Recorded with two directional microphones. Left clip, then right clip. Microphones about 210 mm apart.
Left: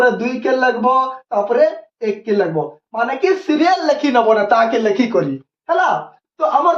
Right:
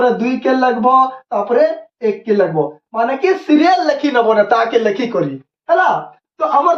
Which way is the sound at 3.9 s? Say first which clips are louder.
Even; 20° left (ahead or behind).